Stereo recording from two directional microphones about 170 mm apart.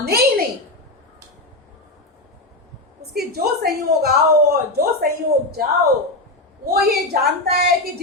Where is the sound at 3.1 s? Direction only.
65° right (ahead or behind).